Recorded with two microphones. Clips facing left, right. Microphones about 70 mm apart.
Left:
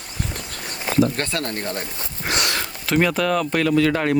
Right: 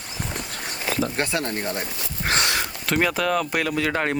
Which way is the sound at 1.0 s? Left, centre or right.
Centre.